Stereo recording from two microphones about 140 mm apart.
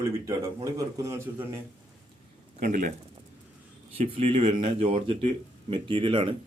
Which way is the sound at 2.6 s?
70° right (ahead or behind).